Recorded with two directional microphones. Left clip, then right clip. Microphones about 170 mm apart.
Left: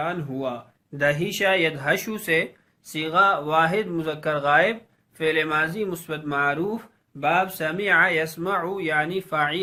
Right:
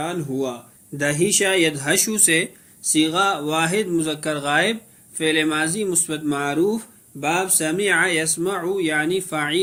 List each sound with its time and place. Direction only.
0.0 s speech: 25° right (ahead or behind)